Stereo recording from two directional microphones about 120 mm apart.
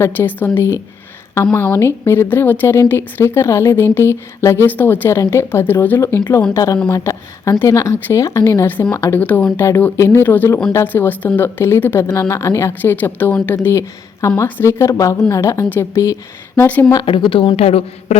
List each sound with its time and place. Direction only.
0.0 s speech: 15° left (ahead or behind)
16.6 s speech: 15° left (ahead or behind)
16.9 s a woman's voice: 40° left (ahead or behind); by 18.2 s 55° left (ahead or behind)